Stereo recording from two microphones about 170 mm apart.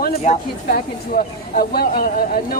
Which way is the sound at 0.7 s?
60° left (ahead or behind).